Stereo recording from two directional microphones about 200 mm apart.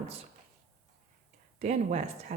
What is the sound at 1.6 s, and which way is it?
Speech, 35° right (ahead or behind).